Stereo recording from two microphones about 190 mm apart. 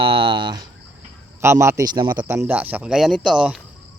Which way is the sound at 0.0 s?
25° right (ahead or behind).